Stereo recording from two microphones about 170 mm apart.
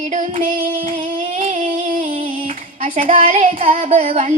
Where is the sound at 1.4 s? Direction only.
35° right (ahead or behind).